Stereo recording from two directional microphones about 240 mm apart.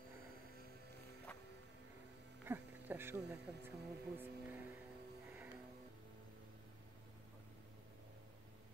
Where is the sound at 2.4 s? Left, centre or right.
Centre.